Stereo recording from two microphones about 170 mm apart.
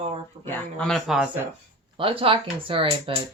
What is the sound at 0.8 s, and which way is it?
Speech, centre (ahead or behind).